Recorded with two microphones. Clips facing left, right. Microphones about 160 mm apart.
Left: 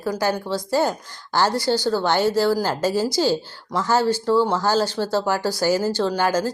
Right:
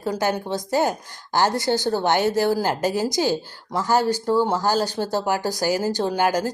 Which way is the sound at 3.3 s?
40° right (ahead or behind).